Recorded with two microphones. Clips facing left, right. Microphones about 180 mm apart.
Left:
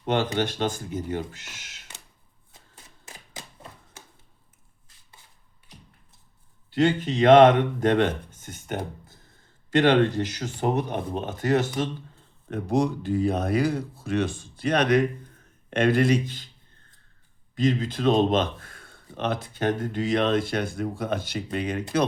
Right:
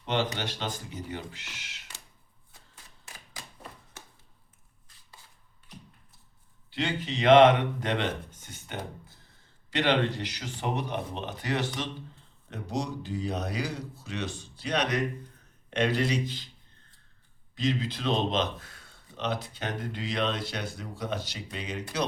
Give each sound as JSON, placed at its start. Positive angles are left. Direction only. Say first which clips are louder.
{"t": 0.0, "sound": "a man's voice", "louder": "left 5 dB", "side_deg": 50}
{"t": 3.1, "sound": "typewriter", "louder": "left 4 dB", "side_deg": 25}
{"t": 6.7, "sound": "a man's voice", "louder": "left 9 dB", "side_deg": 45}
{"t": 17.5, "sound": "a man's voice", "louder": "left 5 dB", "side_deg": 50}